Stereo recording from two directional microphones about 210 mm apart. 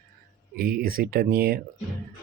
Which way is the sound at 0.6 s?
45° right (ahead or behind).